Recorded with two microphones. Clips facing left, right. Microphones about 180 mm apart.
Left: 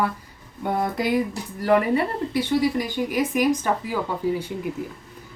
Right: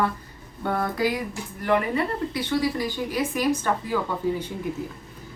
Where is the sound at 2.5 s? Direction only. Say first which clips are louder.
Left 2 dB; 20° left (ahead or behind).